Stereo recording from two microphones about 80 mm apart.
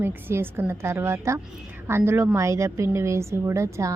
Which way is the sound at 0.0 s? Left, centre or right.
Right.